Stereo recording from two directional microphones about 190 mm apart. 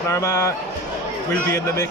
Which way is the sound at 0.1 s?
15° left (ahead or behind).